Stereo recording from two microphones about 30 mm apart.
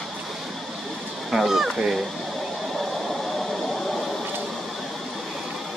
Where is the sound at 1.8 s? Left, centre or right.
Centre.